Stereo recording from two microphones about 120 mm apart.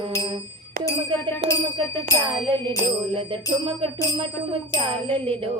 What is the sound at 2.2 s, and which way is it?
Music, 45° right (ahead or behind).